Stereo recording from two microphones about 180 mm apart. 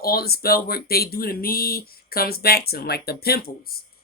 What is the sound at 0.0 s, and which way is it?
Speech, 60° left (ahead or behind).